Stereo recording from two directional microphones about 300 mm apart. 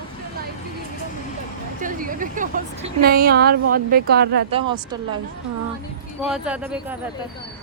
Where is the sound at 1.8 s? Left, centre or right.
Right.